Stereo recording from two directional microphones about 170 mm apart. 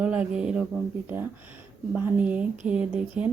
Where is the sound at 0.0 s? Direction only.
5° right (ahead or behind).